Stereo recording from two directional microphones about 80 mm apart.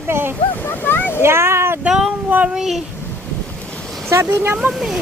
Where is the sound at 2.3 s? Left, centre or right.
Centre.